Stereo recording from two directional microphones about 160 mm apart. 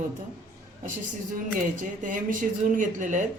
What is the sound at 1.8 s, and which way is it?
A man's voice, 55° right (ahead or behind).